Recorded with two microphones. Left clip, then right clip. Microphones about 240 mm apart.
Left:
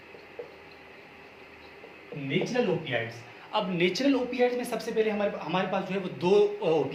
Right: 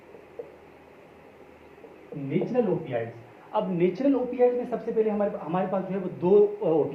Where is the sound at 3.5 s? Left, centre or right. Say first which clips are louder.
Right 2 dB; left.